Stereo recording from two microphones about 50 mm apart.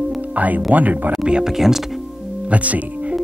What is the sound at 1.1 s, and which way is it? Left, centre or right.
Speech, centre.